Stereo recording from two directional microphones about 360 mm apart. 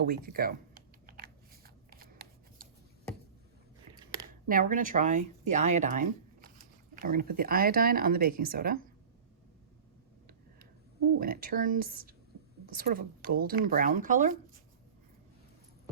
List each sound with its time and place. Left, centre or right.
0.0 s computer keyboard: right
4.4 s speech: right
11.2 s speech: right